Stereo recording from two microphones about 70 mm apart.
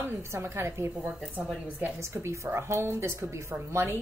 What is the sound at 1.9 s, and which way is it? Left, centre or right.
Speech, right.